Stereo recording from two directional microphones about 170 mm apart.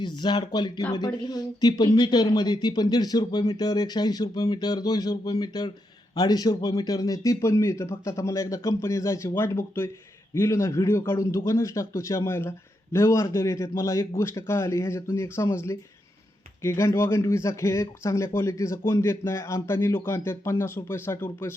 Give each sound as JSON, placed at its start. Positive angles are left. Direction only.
{"t": 0.0, "sound": "a man's voice", "side_deg": 25}